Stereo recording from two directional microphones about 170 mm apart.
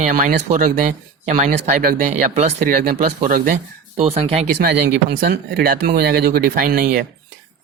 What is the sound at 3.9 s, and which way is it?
Speech, 40° right (ahead or behind).